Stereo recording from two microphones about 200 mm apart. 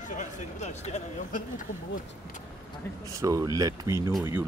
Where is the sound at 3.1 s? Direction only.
15° right (ahead or behind).